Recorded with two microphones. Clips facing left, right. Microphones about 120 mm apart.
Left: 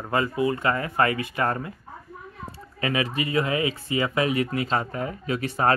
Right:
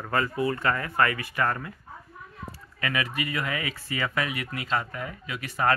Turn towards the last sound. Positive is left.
turn(degrees=30)  # may be behind; listen again after turning